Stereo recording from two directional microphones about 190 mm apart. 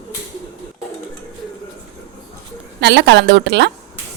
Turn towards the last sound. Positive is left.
turn(degrees=-65)  # may be behind; listen again after turning